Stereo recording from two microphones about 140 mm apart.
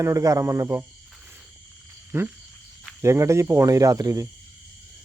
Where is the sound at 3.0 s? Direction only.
20° right (ahead or behind).